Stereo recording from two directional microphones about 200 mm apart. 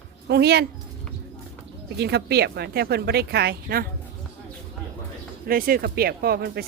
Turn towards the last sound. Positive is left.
turn(degrees=-50)  # may be behind; listen again after turning